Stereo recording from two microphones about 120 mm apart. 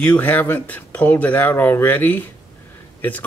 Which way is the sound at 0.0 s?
15° left (ahead or behind).